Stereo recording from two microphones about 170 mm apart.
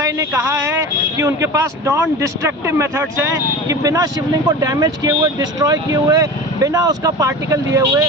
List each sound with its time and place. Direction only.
0.0 s a man's voice: 20° right (ahead or behind)